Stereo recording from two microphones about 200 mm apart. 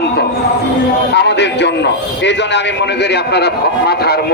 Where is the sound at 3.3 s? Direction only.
55° left (ahead or behind).